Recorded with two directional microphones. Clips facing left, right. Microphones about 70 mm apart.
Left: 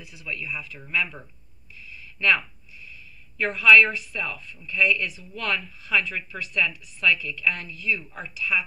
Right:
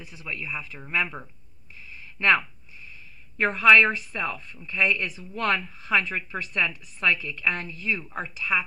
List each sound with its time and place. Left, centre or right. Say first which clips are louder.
0.0 s a woman's voice: even; right
1.9 s a sound: right 1 dB; right
3.3 s a woman's voice: even; right